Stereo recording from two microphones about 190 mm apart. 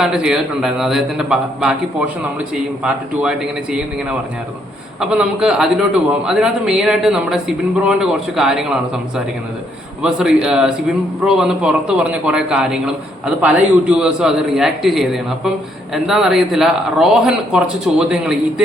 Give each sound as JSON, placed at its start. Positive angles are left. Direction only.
{"t": 0.0, "sound": "a man's voice", "side_deg": -5}
{"t": 4.9, "sound": "a man's voice", "side_deg": -5}